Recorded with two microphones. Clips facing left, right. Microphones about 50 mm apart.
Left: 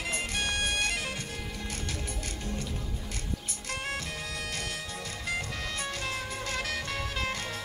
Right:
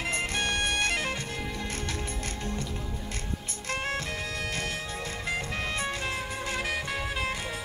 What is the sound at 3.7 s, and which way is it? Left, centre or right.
Music, right.